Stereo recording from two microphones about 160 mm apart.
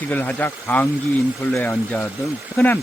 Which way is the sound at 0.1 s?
10° left (ahead or behind).